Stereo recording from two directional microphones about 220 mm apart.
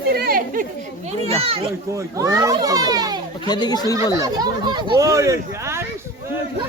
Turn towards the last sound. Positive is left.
turn(degrees=-10)  # may be behind; listen again after turning